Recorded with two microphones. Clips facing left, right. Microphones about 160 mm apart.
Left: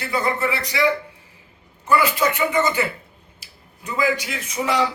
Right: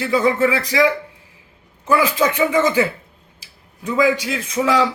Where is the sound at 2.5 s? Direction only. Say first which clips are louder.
Right 4 dB; 90° right.